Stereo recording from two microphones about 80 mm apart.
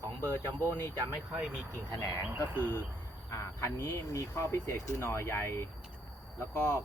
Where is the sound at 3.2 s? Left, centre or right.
Left.